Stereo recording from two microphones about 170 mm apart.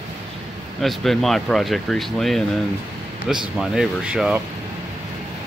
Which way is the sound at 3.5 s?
Centre (ahead or behind).